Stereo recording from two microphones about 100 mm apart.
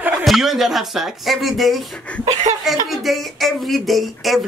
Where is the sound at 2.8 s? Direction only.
Centre (ahead or behind).